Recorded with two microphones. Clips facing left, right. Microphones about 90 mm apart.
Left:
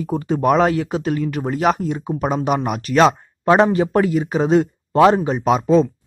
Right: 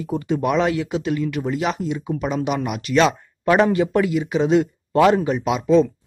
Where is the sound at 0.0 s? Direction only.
40° left (ahead or behind).